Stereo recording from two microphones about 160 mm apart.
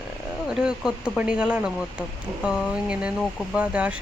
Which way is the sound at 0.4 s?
5° right (ahead or behind).